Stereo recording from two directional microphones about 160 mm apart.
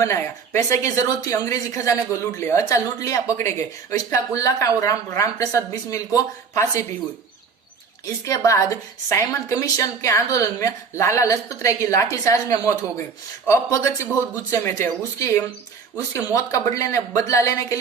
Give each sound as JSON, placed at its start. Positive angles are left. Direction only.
{"t": 0.0, "sound": "a woman's voice", "side_deg": 20}
{"t": 8.2, "sound": "a woman's voice", "side_deg": 20}